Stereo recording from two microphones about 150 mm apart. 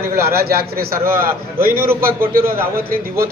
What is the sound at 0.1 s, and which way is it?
Speech, 90° right.